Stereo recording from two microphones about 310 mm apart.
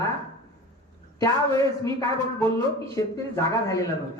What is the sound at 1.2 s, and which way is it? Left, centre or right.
Speech, centre.